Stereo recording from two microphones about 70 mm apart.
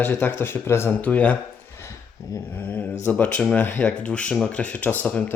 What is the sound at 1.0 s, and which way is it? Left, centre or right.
Speech, left.